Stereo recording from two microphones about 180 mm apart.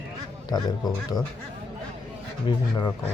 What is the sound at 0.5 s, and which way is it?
Speech, 20° left (ahead or behind).